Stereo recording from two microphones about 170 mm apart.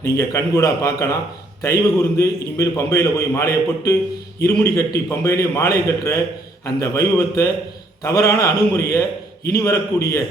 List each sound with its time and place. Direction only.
0.0 s a man's voice: 15° left (ahead or behind)